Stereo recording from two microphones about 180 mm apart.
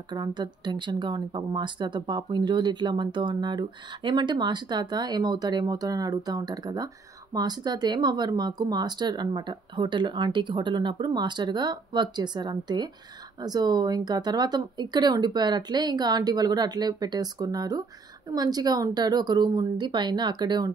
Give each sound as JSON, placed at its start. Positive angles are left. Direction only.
{"t": 0.1, "sound": "speech", "side_deg": -25}